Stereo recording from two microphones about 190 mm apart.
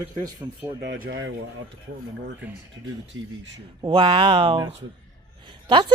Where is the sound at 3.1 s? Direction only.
90° right.